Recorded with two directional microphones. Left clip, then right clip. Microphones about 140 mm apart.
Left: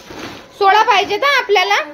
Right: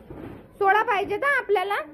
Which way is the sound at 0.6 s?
25° left (ahead or behind).